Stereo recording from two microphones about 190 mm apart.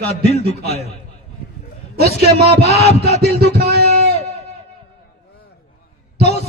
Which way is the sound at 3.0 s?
55° right (ahead or behind).